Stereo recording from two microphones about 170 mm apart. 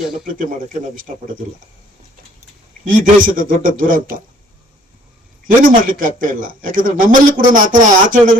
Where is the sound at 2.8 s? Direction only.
55° right (ahead or behind).